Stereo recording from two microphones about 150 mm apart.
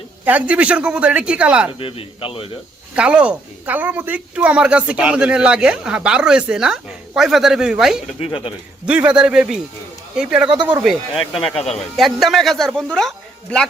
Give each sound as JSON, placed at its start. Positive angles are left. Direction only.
{"t": 0.3, "sound": "speech", "side_deg": -10}
{"t": 1.8, "sound": "speech", "side_deg": 35}
{"t": 2.9, "sound": "speech", "side_deg": -5}
{"t": 8.2, "sound": "speech", "side_deg": 35}
{"t": 8.9, "sound": "speech", "side_deg": -5}
{"t": 10.6, "sound": "speech", "side_deg": -30}
{"t": 11.5, "sound": "speech", "side_deg": 45}
{"t": 11.9, "sound": "speech", "side_deg": 0}